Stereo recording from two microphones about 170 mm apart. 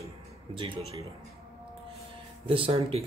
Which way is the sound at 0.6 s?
35° right (ahead or behind).